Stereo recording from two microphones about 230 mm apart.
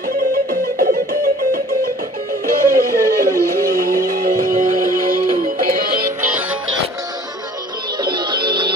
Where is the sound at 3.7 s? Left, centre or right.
Right.